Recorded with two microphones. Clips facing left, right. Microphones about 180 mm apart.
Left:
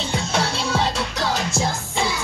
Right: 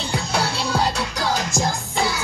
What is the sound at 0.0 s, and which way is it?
Music, centre (ahead or behind).